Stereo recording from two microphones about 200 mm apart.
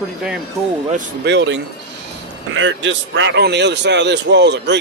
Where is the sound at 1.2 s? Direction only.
65° right (ahead or behind).